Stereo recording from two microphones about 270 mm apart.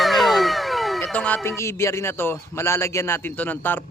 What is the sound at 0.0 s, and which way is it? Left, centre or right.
Speech, centre.